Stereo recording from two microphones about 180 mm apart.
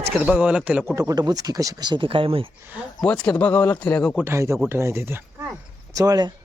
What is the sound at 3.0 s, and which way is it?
Speech, 5° left (ahead or behind).